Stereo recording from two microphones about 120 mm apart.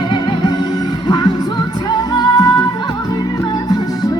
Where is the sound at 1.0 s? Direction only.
35° left (ahead or behind).